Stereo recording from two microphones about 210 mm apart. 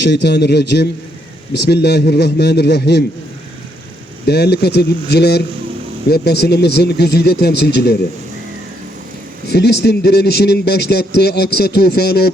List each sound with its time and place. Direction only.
0.0 s speech: 55° left (ahead or behind)
4.3 s speech: 50° left (ahead or behind)
9.5 s speech: 50° left (ahead or behind)